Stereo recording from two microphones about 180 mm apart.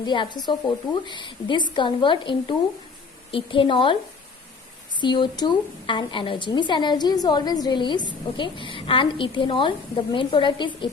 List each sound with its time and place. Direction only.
0.0 s a woman's voice: 25° left (ahead or behind)
4.9 s a woman's voice: 25° left (ahead or behind)